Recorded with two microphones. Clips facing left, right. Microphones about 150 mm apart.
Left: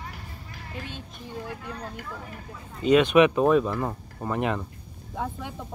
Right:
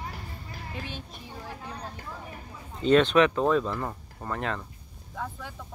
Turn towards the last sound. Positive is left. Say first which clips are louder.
# left 4 dB
turn(degrees=20)  # may be behind; listen again after turning